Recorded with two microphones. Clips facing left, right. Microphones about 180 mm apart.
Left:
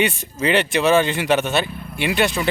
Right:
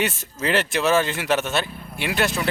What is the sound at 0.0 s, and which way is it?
Speech, centre (ahead or behind).